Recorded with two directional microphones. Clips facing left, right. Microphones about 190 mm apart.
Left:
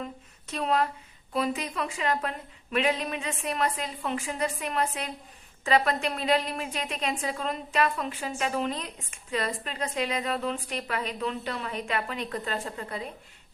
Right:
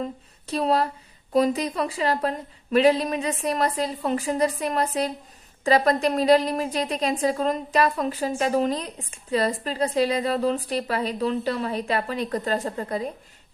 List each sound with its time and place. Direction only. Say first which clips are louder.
0.0 s a woman's voice: right 6 dB; 35° right (ahead or behind)